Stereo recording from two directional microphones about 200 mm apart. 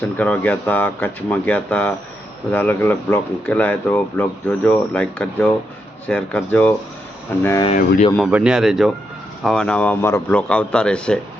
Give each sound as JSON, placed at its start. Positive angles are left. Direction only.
{"t": 0.0, "sound": "speech", "side_deg": 5}
{"t": 7.7, "sound": "speech", "side_deg": 35}
{"t": 8.3, "sound": "speech", "side_deg": -5}